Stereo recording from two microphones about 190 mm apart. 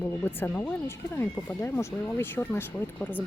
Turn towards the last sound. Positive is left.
turn(degrees=10)  # may be behind; listen again after turning